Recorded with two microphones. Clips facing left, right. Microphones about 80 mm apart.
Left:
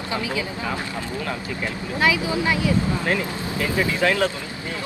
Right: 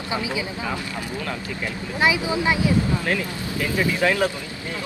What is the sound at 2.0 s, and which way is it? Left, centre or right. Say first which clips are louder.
Speech: even; right.